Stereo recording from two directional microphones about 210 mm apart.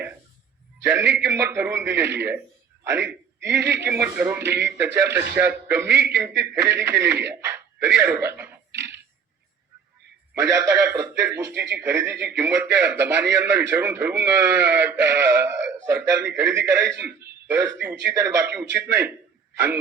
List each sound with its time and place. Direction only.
0.9 s a man's voice: 10° right (ahead or behind)
10.5 s speech: 15° right (ahead or behind)
12.1 s speech: 55° right (ahead or behind)
12.4 s speech: 10° right (ahead or behind)